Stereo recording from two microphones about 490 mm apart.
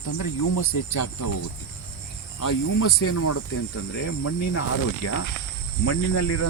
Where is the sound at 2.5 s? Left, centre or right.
Left.